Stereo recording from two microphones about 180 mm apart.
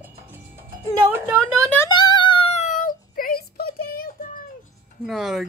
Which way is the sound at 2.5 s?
45° left (ahead or behind).